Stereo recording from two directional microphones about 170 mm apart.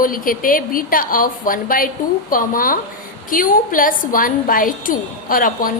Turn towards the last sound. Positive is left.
turn(degrees=55)  # may be behind; listen again after turning